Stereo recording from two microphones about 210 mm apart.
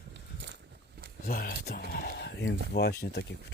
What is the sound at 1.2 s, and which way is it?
Speech, 45° left (ahead or behind).